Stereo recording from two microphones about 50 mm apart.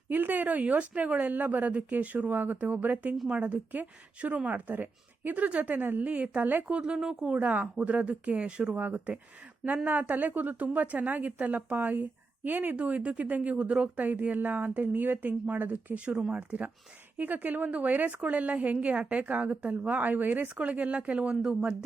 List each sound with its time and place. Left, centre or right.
0.1 s speech: right
3.2 s a woman's voice: right
4.7 s speech: right
6.4 s speech: right
6.7 s speech: right
7.3 s a woman's voice: right
12.7 s speech: right
16.0 s speech: centre
16.3 s a woman's voice: right